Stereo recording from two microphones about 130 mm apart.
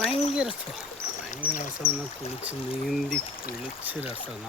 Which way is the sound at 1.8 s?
15° right (ahead or behind).